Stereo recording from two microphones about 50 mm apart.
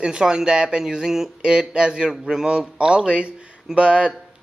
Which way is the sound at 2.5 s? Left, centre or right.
Centre.